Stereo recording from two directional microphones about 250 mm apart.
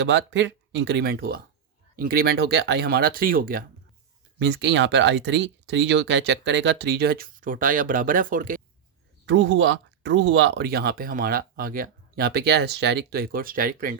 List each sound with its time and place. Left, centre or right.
0.0 s speech: right
9.2 s speech: right